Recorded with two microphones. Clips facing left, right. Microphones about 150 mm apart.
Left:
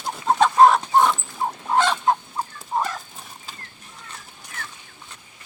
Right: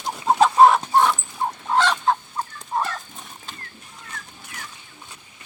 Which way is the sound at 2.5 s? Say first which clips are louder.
Even; 10° left (ahead or behind).